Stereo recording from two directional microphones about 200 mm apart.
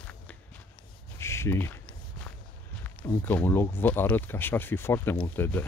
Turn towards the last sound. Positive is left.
turn(degrees=10)  # may be behind; listen again after turning